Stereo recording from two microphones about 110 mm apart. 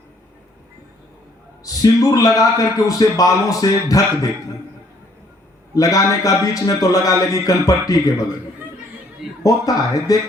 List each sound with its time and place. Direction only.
1.6 s a man's voice: 30° left (ahead or behind)
5.7 s a man's voice: 30° left (ahead or behind)
9.4 s a man's voice: 35° left (ahead or behind)